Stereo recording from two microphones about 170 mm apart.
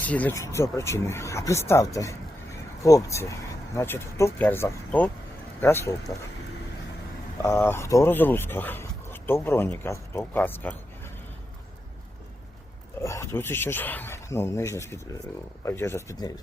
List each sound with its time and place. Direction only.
0.0 s speech: 10° left (ahead or behind)
7.4 s speech: 15° left (ahead or behind)
13.0 s speech: 15° left (ahead or behind)